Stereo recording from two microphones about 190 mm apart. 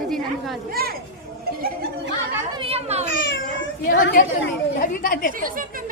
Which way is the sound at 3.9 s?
50° left (ahead or behind).